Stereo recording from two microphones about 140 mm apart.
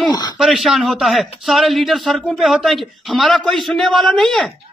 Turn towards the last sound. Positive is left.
turn(degrees=5)  # may be behind; listen again after turning